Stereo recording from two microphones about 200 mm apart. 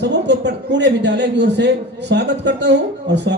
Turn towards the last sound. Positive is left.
turn(degrees=-60)  # may be behind; listen again after turning